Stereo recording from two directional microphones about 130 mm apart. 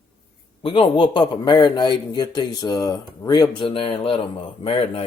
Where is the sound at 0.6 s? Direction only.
40° left (ahead or behind).